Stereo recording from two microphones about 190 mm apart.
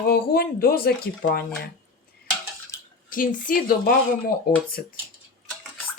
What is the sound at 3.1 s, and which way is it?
A woman's voice, 45° left (ahead or behind).